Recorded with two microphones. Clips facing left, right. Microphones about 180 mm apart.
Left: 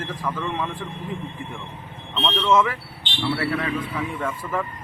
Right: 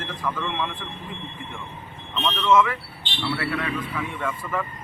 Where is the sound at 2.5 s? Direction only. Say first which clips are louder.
Right 1 dB; 35° left (ahead or behind).